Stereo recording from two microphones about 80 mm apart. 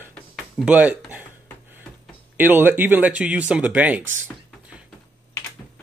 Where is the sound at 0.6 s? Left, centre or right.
Centre.